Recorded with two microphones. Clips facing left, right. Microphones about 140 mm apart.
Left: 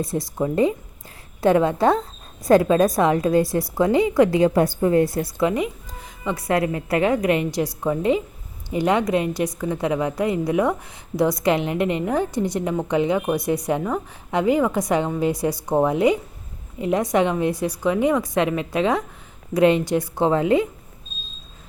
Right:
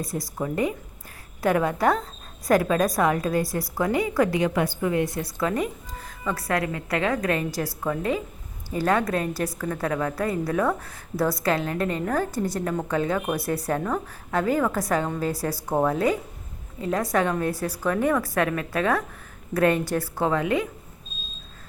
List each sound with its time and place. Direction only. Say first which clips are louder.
0.0 s a woman's voice: left 5 dB; 25° left (ahead or behind)